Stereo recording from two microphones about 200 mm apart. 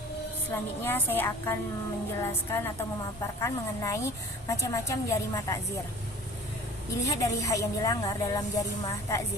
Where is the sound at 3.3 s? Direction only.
15° left (ahead or behind).